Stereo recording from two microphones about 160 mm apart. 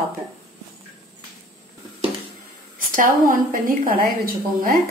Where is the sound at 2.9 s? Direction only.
60° right (ahead or behind).